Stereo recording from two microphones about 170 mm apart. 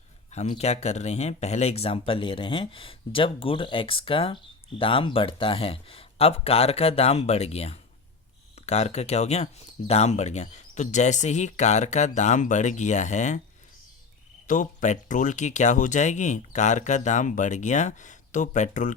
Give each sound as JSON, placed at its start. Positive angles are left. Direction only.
{"t": 0.3, "sound": "speech", "side_deg": 40}
{"t": 14.4, "sound": "speech", "side_deg": 50}